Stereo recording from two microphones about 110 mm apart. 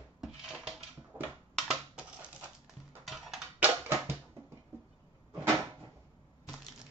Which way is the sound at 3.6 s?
25° right (ahead or behind).